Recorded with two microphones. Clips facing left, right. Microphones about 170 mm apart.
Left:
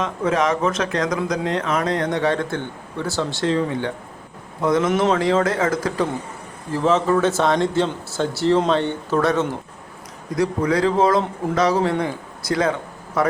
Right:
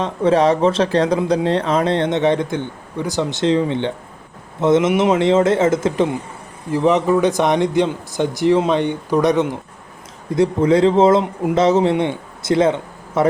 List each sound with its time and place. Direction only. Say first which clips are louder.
0.0 s speech: right 5 dB; 30° right (ahead or behind)
4.9 s speech: right 3 dB; 15° right (ahead or behind)
5.2 s a man's voice: right 5 dB; 25° right (ahead or behind)